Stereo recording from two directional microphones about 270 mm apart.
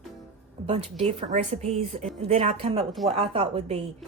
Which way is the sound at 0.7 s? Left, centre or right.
Right.